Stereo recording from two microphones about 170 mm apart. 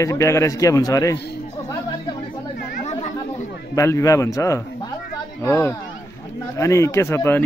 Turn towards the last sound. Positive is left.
turn(degrees=15)  # may be behind; listen again after turning